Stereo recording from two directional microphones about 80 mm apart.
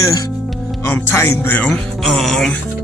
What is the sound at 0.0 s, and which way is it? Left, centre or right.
Speech, left.